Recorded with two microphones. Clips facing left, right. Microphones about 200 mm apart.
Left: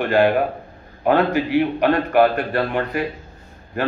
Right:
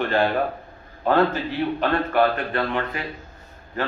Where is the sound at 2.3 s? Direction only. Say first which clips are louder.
Left 3 dB; 40° left (ahead or behind).